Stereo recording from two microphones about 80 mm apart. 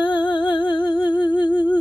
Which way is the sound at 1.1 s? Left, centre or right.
Left.